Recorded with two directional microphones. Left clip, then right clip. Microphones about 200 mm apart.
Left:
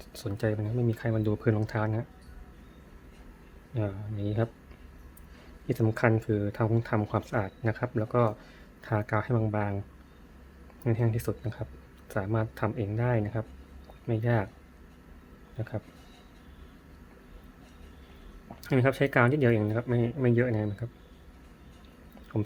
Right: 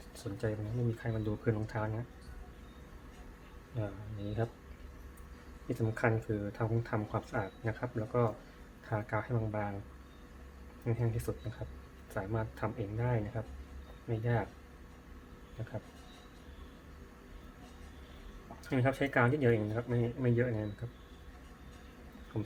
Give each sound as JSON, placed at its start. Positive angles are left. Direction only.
{"t": 0.1, "sound": "speech", "side_deg": 55}
{"t": 3.7, "sound": "speech", "side_deg": 60}
{"t": 5.6, "sound": "speech", "side_deg": 55}
{"t": 10.8, "sound": "speech", "side_deg": 55}
{"t": 18.6, "sound": "speech", "side_deg": 55}
{"t": 22.3, "sound": "speech", "side_deg": 50}